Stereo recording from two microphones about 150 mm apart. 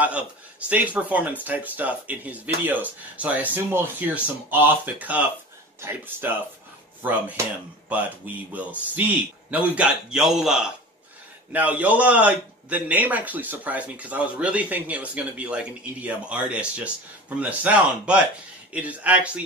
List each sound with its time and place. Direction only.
0.9 s a man's voice: 10° right (ahead or behind)